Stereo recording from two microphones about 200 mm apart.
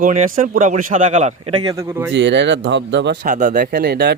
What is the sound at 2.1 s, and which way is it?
Speech, 60° right (ahead or behind).